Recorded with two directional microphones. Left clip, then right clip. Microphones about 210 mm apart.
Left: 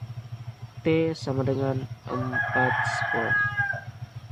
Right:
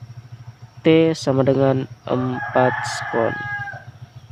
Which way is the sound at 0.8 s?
45° right (ahead or behind).